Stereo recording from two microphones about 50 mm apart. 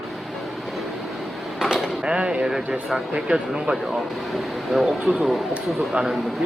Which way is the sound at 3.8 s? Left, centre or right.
Centre.